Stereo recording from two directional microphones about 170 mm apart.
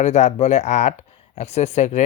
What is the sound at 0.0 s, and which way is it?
Speech, 40° left (ahead or behind).